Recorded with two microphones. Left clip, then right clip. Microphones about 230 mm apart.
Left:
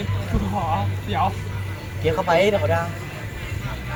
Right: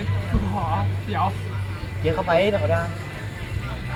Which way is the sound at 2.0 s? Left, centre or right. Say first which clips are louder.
Left 2 dB; left.